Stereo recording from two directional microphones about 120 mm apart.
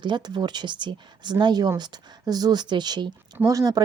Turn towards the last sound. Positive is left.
turn(degrees=-30)  # may be behind; listen again after turning